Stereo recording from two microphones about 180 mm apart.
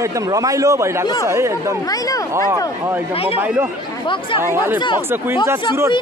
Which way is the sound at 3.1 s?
35° left (ahead or behind).